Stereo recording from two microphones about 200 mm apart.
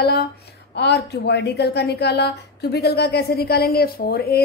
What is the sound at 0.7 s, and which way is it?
A woman's voice, 60° left (ahead or behind).